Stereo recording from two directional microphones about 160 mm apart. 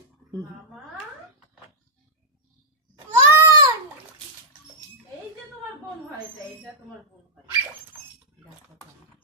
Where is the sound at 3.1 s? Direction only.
20° right (ahead or behind).